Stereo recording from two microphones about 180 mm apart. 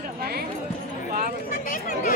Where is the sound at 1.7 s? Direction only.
50° left (ahead or behind).